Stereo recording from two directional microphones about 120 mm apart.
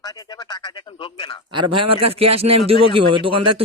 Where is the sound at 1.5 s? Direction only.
45° right (ahead or behind).